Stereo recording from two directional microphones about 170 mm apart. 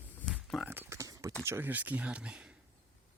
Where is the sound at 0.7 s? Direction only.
15° right (ahead or behind).